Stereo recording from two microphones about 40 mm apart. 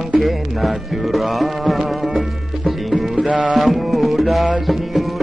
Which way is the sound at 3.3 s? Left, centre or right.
Right.